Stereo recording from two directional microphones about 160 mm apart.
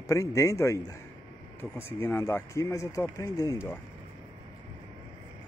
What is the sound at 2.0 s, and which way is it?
Speech, 15° left (ahead or behind).